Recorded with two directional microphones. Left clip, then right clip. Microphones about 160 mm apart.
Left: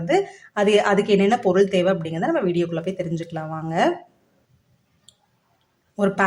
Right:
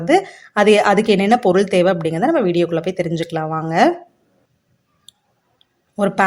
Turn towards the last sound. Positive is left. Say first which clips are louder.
# right 4 dB
turn(degrees=-30)  # may be behind; listen again after turning